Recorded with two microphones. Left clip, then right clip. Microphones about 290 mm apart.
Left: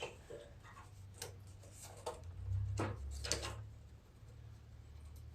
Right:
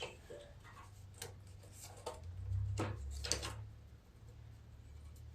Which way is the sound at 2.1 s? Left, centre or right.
Centre.